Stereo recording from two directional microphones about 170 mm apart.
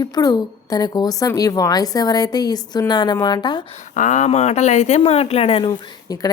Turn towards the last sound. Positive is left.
turn(degrees=20)  # may be behind; listen again after turning